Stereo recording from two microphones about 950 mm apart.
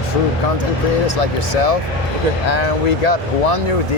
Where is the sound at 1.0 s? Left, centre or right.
Left.